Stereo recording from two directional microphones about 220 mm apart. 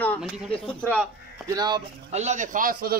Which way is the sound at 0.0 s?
5° left (ahead or behind).